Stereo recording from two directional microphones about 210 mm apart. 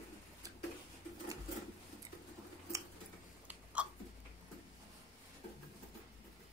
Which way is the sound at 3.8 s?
5° right (ahead or behind).